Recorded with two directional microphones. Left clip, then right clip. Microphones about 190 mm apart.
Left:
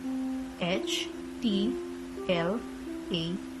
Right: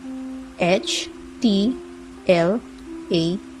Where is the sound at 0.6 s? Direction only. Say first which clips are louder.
Right 11 dB; 20° right (ahead or behind).